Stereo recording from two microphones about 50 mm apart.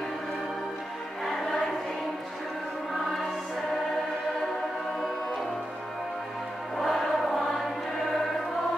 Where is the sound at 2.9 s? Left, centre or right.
Centre.